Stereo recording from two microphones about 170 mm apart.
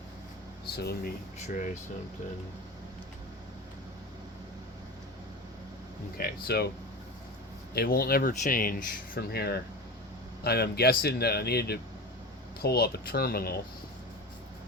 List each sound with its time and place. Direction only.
0.8 s speech: 70° left (ahead or behind)
1.4 s speech: 45° left (ahead or behind)
6.1 s speech: 70° left (ahead or behind)
7.7 s speech: 65° left (ahead or behind)